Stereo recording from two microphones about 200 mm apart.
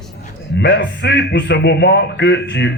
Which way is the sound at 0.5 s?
60° left (ahead or behind).